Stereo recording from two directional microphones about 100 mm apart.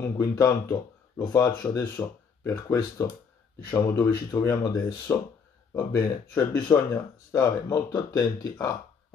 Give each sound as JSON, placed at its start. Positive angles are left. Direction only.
{"t": 0.0, "sound": "speech", "side_deg": 35}
{"t": 7.9, "sound": "speech", "side_deg": 40}